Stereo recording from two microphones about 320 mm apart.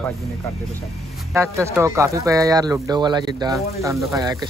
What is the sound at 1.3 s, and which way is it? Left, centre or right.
Speech, centre.